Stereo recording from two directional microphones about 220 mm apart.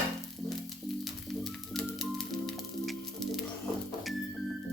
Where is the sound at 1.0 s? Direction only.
Centre (ahead or behind).